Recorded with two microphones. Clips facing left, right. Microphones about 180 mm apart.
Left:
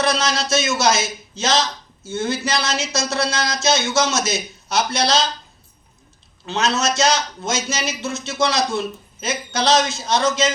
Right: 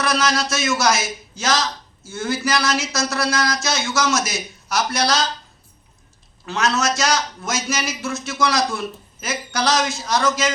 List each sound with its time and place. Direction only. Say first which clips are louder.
0.0 s a man's voice: even; 25° left (ahead or behind)
6.4 s a man's voice: even; 25° left (ahead or behind)